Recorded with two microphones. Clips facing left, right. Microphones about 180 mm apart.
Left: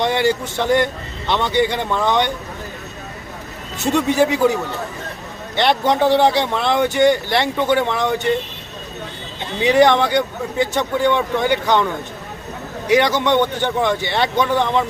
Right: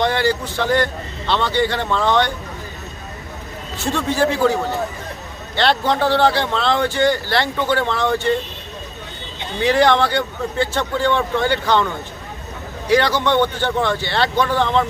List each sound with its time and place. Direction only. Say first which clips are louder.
0.0 s speech: left 1 dB; 20° left (ahead or behind)
3.8 s speech: left 3 dB; 20° left (ahead or behind)
5.5 s speech: left 1 dB; 20° left (ahead or behind)
9.6 s speech: left 2 dB; 20° left (ahead or behind)
12.9 s speech: left 1 dB; 20° left (ahead or behind)